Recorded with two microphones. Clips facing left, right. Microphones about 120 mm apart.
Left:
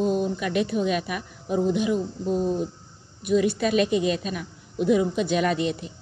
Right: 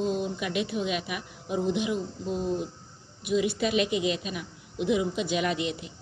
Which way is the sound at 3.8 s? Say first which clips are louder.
Left 4 dB; 40° left (ahead or behind).